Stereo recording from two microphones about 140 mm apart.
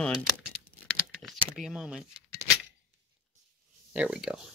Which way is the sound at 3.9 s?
5° right (ahead or behind).